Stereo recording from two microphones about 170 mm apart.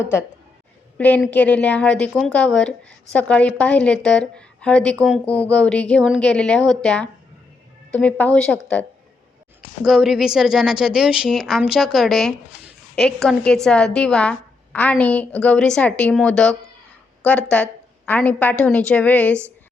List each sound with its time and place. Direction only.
0.0 s a woman's voice: 15° left (ahead or behind)